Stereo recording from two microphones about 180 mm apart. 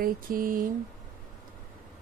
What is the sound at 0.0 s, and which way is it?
Speech, 50° right (ahead or behind).